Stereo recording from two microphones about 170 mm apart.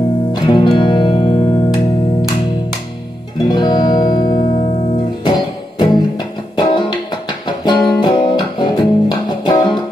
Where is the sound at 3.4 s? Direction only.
25° left (ahead or behind).